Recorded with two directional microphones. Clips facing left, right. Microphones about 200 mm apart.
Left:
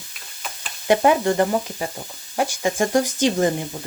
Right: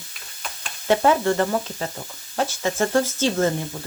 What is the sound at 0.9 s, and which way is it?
Speech, 15° left (ahead or behind).